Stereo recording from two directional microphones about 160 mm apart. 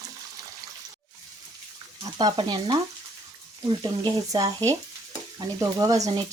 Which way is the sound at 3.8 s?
25° right (ahead or behind).